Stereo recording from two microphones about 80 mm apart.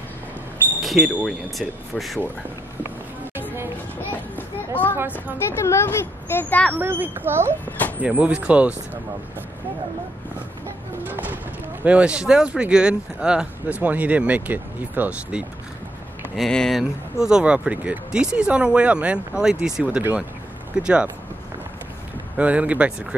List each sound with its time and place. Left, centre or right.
0.7 s speech: centre
3.3 s a sound: right
4.4 s a sound: left
5.6 s speech: left
6.7 s speech: right
8.0 s speech: centre
11.1 s speech: right
16.3 s speech: centre
17.2 s speech: centre
22.4 s speech: centre